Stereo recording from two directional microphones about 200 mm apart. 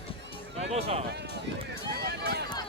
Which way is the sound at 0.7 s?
30° right (ahead or behind).